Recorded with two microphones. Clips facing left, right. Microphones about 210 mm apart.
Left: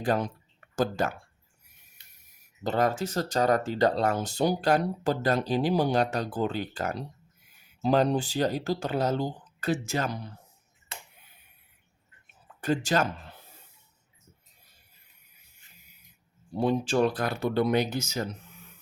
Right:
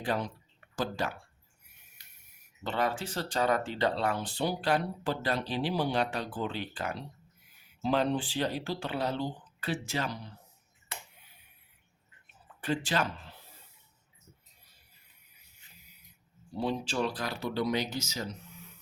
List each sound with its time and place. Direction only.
0.0 s speech: 45° left (ahead or behind)
2.6 s speech: 45° left (ahead or behind)
12.5 s speech: 45° left (ahead or behind)
16.6 s speech: 50° left (ahead or behind)